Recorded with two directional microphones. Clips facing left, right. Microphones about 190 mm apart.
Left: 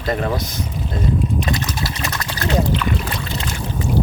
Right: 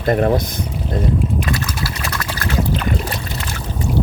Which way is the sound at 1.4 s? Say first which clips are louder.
Even; 20° left (ahead or behind).